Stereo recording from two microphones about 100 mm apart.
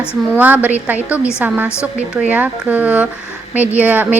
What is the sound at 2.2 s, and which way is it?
A woman's voice, 10° right (ahead or behind).